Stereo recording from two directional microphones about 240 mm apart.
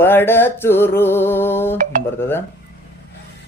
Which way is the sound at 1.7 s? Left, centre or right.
Right.